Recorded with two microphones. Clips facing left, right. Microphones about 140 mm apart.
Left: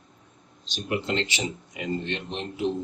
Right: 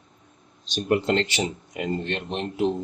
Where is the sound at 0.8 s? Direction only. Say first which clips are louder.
Right 5 dB; 50° right (ahead or behind).